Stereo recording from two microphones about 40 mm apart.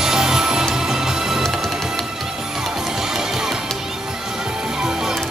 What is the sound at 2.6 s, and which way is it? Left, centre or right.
Music, centre.